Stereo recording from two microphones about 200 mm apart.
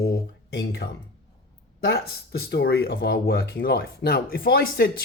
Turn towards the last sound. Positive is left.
turn(degrees=50)  # may be behind; listen again after turning